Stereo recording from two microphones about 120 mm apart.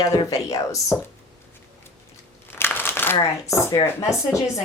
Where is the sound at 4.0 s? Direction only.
25° left (ahead or behind).